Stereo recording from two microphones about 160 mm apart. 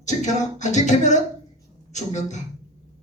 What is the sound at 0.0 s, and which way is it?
A man's voice, 50° left (ahead or behind).